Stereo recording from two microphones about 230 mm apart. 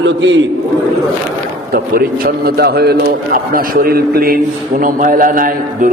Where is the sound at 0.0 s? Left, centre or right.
Right.